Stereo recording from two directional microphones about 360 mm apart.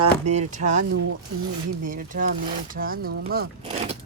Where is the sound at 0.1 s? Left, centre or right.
Centre.